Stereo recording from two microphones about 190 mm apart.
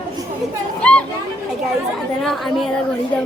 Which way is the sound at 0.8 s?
5° left (ahead or behind).